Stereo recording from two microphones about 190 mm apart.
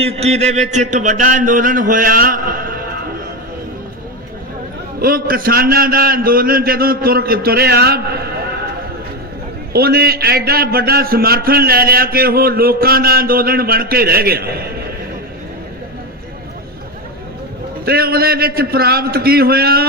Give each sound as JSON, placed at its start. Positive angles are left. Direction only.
{"t": 0.0, "sound": "a man's voice", "side_deg": -30}
{"t": 4.9, "sound": "a man's voice", "side_deg": -50}
{"t": 9.7, "sound": "a man's voice", "side_deg": -55}
{"t": 17.8, "sound": "a man's voice", "side_deg": -55}